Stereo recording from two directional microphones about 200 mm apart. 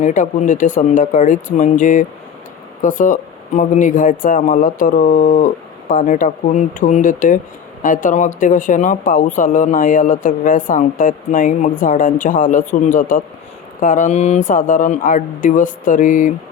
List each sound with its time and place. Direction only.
0.0 s speech: 40° left (ahead or behind)